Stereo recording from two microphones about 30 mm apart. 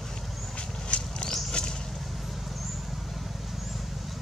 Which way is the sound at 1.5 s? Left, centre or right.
Left.